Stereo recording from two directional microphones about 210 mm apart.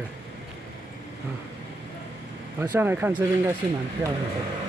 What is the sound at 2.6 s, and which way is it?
Speech, 15° right (ahead or behind).